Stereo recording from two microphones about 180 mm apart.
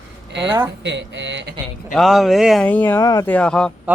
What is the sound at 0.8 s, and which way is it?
Speech, 75° right (ahead or behind).